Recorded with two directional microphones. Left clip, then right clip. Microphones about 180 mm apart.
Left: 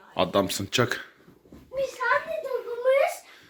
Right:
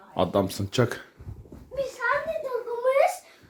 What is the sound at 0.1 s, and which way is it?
A man's voice, 15° right (ahead or behind).